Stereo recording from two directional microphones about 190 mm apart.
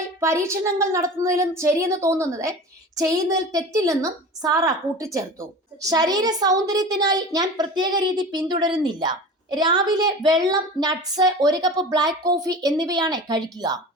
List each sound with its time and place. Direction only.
0.2 s a woman's voice: 15° right (ahead or behind)